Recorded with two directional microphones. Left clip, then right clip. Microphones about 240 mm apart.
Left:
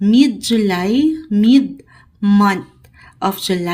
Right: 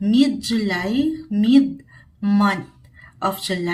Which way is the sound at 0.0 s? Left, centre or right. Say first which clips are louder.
Left 5 dB; left.